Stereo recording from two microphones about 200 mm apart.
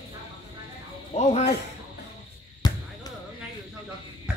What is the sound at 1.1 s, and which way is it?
Speech, 35° left (ahead or behind).